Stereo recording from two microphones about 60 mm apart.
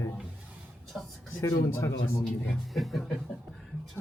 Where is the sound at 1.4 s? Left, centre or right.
Left.